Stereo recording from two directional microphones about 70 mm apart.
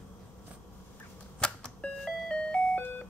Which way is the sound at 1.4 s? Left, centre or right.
Centre.